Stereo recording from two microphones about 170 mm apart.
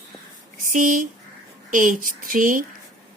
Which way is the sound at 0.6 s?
50° right (ahead or behind).